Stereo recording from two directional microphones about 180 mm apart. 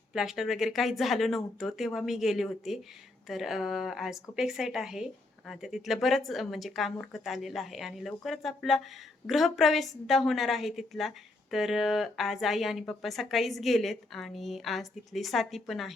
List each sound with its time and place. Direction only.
0.1 s speech: centre (ahead or behind)